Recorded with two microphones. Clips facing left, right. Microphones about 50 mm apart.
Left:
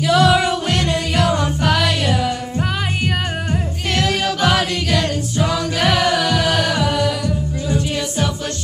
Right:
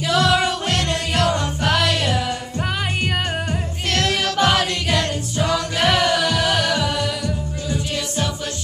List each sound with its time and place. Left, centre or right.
0.0 s music: centre
3.9 s music: centre